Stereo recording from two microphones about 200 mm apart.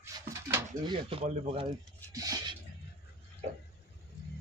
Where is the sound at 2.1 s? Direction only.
20° right (ahead or behind).